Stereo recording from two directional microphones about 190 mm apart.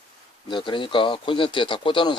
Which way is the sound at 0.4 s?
25° left (ahead or behind).